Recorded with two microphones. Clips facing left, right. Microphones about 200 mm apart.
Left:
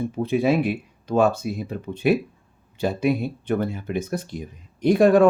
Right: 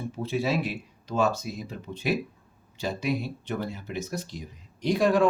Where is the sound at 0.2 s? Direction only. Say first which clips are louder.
Left 7 dB; 55° left (ahead or behind).